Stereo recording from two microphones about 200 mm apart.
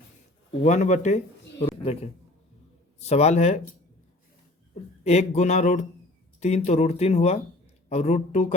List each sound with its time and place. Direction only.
0.6 s speech: 35° left (ahead or behind)
3.0 s speech: 30° left (ahead or behind)
4.7 s speech: 35° left (ahead or behind)